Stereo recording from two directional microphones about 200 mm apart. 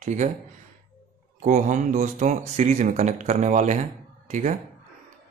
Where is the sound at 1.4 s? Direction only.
40° right (ahead or behind).